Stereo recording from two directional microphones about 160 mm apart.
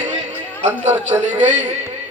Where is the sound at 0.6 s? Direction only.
45° right (ahead or behind).